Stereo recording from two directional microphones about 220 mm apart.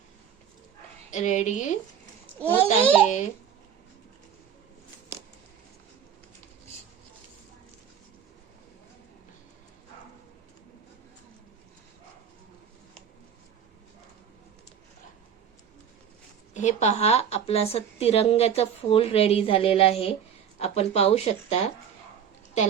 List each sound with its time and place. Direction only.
1.1 s a child's voice: 35° left (ahead or behind)
2.3 s a child's voice: 10° left (ahead or behind)
2.6 s a child's voice: 35° left (ahead or behind)
16.6 s a woman's voice: 30° left (ahead or behind)
22.6 s a child's voice: 30° left (ahead or behind)